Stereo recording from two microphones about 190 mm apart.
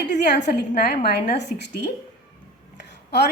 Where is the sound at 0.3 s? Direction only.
65° left (ahead or behind).